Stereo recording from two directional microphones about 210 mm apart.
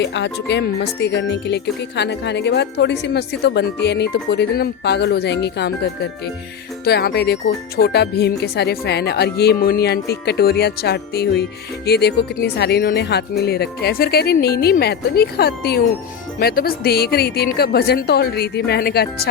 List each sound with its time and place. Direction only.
0.0 s speech: 55° left (ahead or behind)